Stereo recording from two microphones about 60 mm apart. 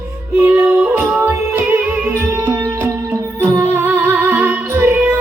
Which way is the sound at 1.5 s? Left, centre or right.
Right.